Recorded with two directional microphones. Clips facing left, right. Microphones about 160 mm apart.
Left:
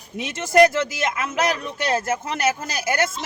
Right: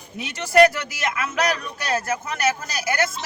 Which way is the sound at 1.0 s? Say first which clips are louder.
Left 1 dB; 25° left (ahead or behind).